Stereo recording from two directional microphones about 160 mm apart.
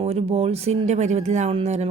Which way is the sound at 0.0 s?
40° right (ahead or behind).